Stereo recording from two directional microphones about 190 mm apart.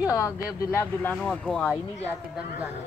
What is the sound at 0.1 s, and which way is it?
Speech, 20° left (ahead or behind).